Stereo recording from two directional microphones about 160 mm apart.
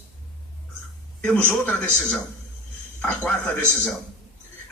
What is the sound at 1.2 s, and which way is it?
Speech, 10° left (ahead or behind).